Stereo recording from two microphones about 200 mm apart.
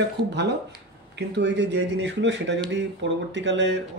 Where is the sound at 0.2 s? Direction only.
60° right (ahead or behind).